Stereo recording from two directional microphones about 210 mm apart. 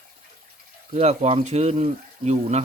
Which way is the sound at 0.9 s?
30° right (ahead or behind).